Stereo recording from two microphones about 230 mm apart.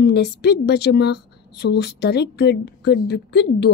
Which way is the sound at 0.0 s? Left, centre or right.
Left.